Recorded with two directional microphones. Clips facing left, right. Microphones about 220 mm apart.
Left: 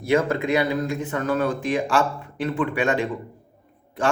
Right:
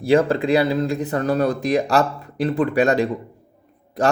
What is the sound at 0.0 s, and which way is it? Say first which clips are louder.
Speech: right 4 dB; 30° right (ahead or behind).